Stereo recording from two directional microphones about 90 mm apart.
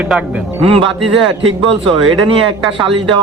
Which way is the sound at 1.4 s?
80° right.